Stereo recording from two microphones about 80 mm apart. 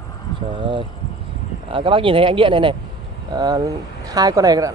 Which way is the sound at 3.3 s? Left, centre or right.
Right.